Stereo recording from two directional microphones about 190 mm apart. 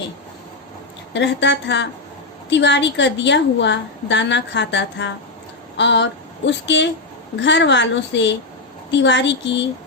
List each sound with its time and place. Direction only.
1.1 s a woman's voice: 70° left (ahead or behind)
5.7 s a sound: 65° left (ahead or behind)
7.3 s a woman's voice: 70° left (ahead or behind)